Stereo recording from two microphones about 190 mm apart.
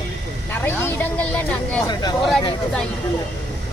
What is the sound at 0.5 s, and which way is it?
Speech, 15° left (ahead or behind).